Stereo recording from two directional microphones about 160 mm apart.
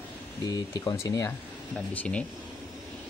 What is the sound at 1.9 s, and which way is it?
Speech, 10° left (ahead or behind).